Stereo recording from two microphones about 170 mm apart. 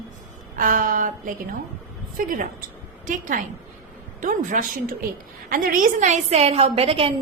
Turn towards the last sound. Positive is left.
turn(degrees=-35)  # may be behind; listen again after turning